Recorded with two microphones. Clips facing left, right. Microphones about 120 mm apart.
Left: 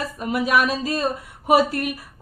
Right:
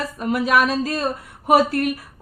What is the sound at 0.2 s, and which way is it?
A woman's voice, centre (ahead or behind).